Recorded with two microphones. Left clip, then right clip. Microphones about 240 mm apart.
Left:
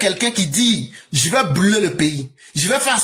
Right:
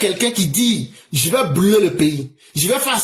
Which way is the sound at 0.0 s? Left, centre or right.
Left.